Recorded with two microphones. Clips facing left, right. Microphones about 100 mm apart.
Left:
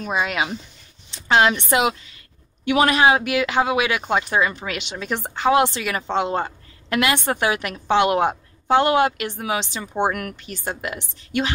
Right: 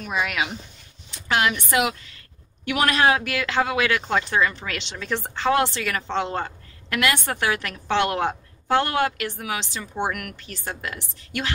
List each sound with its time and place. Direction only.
0.0 s a woman's voice: 25° left (ahead or behind)